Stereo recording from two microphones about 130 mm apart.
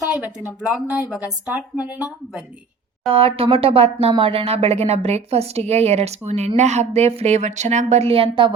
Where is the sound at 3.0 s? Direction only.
45° right (ahead or behind).